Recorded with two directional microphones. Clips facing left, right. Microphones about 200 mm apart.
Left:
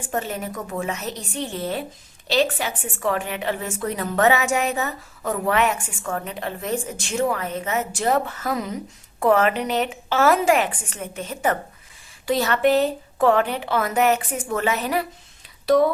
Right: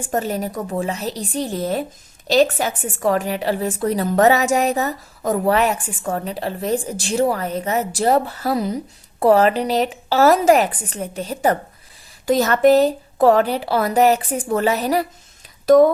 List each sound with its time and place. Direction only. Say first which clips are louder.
0.1 s a woman's voice: right 5 dB; 40° right (ahead or behind)